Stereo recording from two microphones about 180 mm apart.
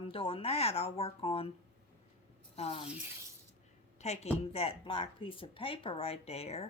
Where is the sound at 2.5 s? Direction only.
35° left (ahead or behind).